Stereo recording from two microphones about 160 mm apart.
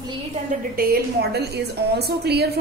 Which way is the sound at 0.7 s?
85° right.